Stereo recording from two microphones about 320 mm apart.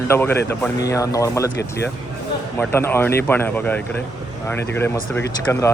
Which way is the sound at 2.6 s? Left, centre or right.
Centre.